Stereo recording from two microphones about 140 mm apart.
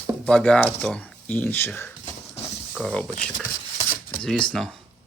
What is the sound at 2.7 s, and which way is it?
Speech, 5° left (ahead or behind).